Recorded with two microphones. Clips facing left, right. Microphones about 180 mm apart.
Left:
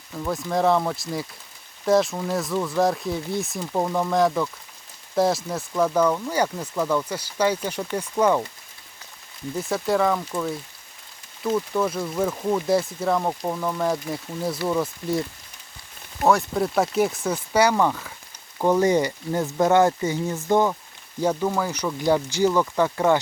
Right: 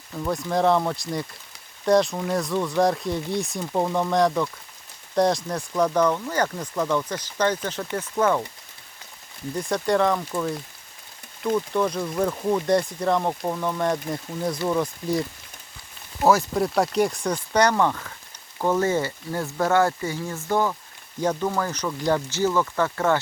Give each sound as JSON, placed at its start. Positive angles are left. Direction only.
{"t": 0.1, "sound": "speech", "side_deg": 0}
{"t": 9.6, "sound": "speech", "side_deg": 5}
{"t": 16.2, "sound": "speech", "side_deg": 0}
{"t": 21.2, "sound": "speech", "side_deg": 10}